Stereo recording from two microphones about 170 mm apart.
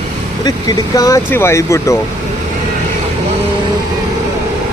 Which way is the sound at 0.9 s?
20° left (ahead or behind).